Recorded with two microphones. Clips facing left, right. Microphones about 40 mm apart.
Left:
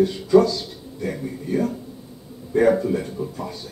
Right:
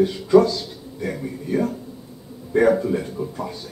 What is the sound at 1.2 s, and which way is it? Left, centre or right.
Speech, centre.